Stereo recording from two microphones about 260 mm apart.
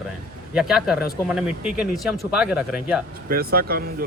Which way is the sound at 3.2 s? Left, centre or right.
Right.